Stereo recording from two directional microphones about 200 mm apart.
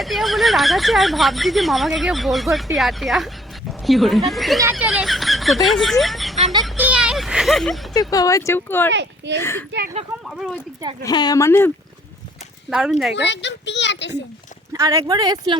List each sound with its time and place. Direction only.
0.0 s speech: centre (ahead or behind)
6.7 s a sound: 5° right (ahead or behind)
7.9 s speech: 20° left (ahead or behind)
8.9 s a child's voice: 60° right (ahead or behind)
9.4 s speech: 10° left (ahead or behind)
10.2 s speech: centre (ahead or behind)
11.0 s speech: 20° left (ahead or behind)
12.7 s speech: 5° right (ahead or behind)
13.1 s speech: 60° left (ahead or behind)
14.7 s speech: 15° right (ahead or behind)